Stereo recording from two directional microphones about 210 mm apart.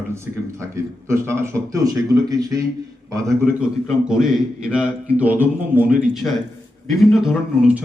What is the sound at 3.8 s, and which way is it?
A man's voice, centre (ahead or behind).